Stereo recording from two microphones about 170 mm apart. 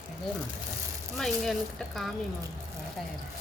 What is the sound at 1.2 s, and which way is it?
Speech, centre (ahead or behind).